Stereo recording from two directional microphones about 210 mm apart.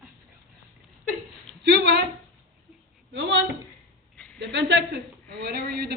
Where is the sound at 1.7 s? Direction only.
55° right (ahead or behind).